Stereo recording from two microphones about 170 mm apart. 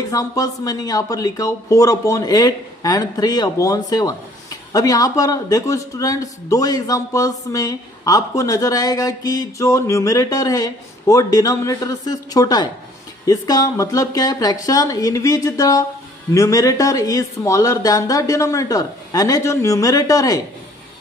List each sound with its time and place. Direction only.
0.1 s speech: 20° left (ahead or behind)